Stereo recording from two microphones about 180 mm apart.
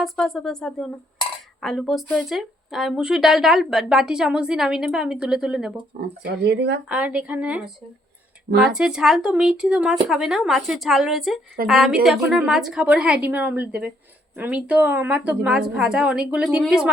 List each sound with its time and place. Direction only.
0.0 s speech: centre (ahead or behind)
6.0 s speech: 60° right (ahead or behind)
6.8 s a woman's voice: 5° right (ahead or behind)
8.4 s speech: 60° right (ahead or behind)
8.7 s speech: 5° right (ahead or behind)